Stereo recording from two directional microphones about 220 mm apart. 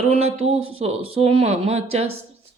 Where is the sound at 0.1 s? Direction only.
30° right (ahead or behind).